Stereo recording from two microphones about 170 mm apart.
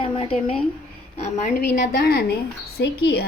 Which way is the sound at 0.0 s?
35° left (ahead or behind).